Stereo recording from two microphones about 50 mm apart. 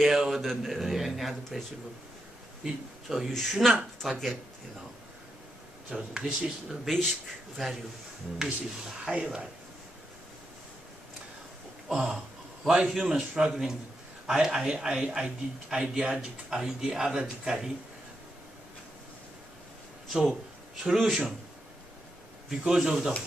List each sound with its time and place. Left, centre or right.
0.0 s a man's voice: centre
2.6 s a man's voice: centre
4.0 s a man's voice: centre
5.9 s a man's voice: centre
6.9 s a man's voice: centre
9.0 s speech: centre
11.9 s a man's voice: centre
20.1 s a man's voice: centre
22.7 s a man's voice: centre